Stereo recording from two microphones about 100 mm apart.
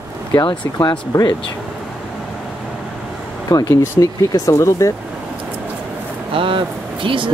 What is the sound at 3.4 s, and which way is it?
Speech, 35° left (ahead or behind).